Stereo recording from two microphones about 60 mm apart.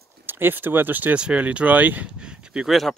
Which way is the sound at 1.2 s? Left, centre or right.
Centre.